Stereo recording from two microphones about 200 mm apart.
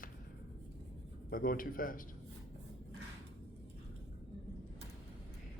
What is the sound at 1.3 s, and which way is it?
Speech, 45° left (ahead or behind).